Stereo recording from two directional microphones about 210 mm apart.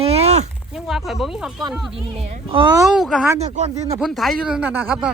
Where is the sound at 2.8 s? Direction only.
Centre (ahead or behind).